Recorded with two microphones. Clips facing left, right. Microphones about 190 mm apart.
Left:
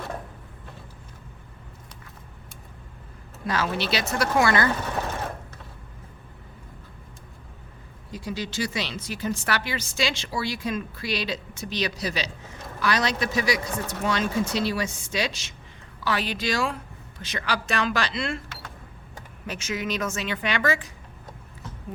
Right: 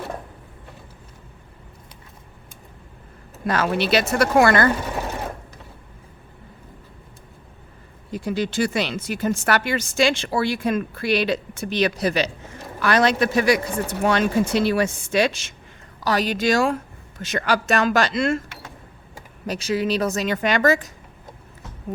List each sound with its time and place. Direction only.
3.4 s speech: 55° right (ahead or behind)
8.1 s speech: 55° right (ahead or behind)
16.0 s speech: 40° right (ahead or behind)
19.5 s a woman's voice: 35° right (ahead or behind)